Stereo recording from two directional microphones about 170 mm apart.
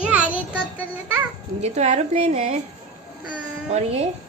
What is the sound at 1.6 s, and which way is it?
A woman's voice, 40° right (ahead or behind).